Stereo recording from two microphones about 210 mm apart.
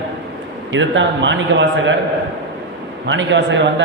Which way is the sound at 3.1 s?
60° right (ahead or behind).